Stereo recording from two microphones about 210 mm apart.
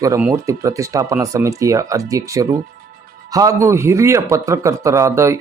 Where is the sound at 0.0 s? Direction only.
10° right (ahead or behind).